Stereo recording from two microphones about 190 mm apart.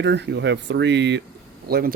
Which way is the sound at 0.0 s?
65° right (ahead or behind).